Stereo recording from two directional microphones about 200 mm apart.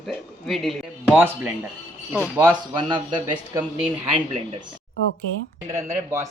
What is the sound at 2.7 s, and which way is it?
Speech, 20° right (ahead or behind).